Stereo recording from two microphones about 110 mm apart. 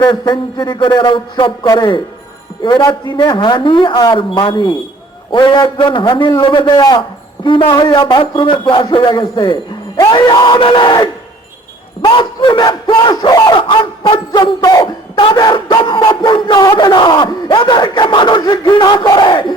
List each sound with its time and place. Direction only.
0.0 s battle cry: 45° left (ahead or behind)
1.6 s a man's voice: 35° left (ahead or behind)
2.6 s battle cry: 50° left (ahead or behind)
14.6 s a man's voice: 35° left (ahead or behind)
15.2 s battle cry: 45° left (ahead or behind)